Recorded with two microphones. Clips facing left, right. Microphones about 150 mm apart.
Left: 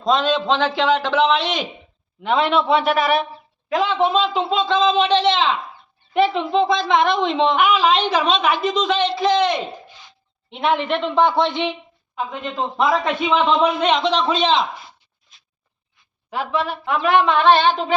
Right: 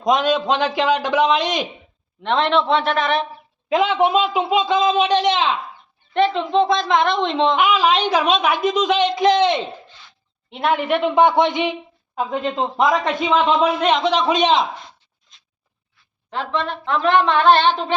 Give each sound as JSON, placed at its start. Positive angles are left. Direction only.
{"t": 0.0, "sound": "speech", "side_deg": -15}
{"t": 2.2, "sound": "a man's voice", "side_deg": 5}
{"t": 3.7, "sound": "speech", "side_deg": -20}
{"t": 6.1, "sound": "a woman's voice", "side_deg": 5}
{"t": 7.9, "sound": "speech", "side_deg": -10}
{"t": 10.5, "sound": "speech", "side_deg": 0}
{"t": 12.1, "sound": "speech", "side_deg": -30}
{"t": 12.7, "sound": "speech", "side_deg": -15}
{"t": 13.1, "sound": "a woman's voice", "side_deg": 0}
{"t": 16.3, "sound": "a woman's voice", "side_deg": 10}